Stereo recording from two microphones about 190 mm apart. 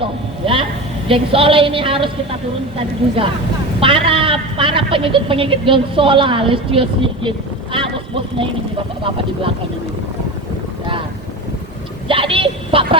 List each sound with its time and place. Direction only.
0.0 s vehicle: 25° right (ahead or behind)
1.0 s a woman's voice: 30° right (ahead or behind)
12.0 s a sound: 30° right (ahead or behind)